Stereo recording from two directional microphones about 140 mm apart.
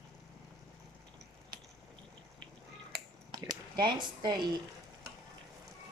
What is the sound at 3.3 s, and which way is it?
Squish, 30° right (ahead or behind).